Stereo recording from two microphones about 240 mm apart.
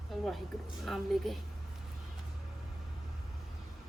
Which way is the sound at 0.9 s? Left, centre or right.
Centre.